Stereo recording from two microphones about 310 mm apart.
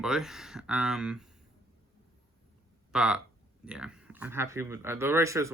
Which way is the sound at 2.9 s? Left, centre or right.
Centre.